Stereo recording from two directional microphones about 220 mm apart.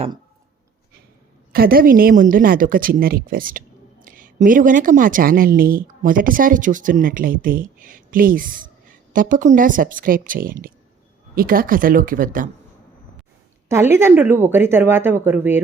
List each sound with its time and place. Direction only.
1.5 s a woman's voice: 40° right (ahead or behind)
13.7 s speech: 10° right (ahead or behind)